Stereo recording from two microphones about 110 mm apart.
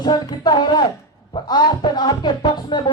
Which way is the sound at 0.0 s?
40° left (ahead or behind).